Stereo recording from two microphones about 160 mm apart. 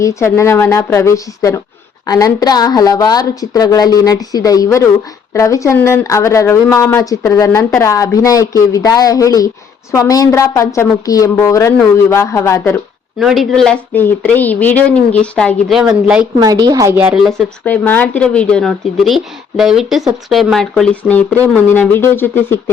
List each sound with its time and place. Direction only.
0.0 s a woman's voice: 15° left (ahead or behind)
7.6 s speech: 10° left (ahead or behind)
7.9 s a woman's voice: 20° left (ahead or behind)
13.1 s speech: centre (ahead or behind)
15.8 s speech: 5° right (ahead or behind)
16.4 s a woman's voice: 25° right (ahead or behind)
17.2 s speech: 5° left (ahead or behind)